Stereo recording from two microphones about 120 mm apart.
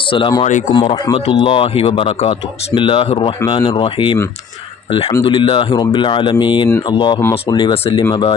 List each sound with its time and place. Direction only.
0.1 s speech: 40° left (ahead or behind)
3.4 s speech: 30° left (ahead or behind)
3.8 s speech: 45° left (ahead or behind)
5.2 s speech: 45° left (ahead or behind)
7.2 s speech: 20° left (ahead or behind)
7.5 s speech: 45° left (ahead or behind)